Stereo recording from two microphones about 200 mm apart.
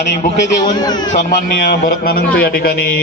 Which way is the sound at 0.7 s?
20° left (ahead or behind).